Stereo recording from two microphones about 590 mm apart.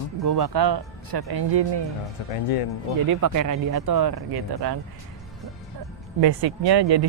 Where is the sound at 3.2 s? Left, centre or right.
Right.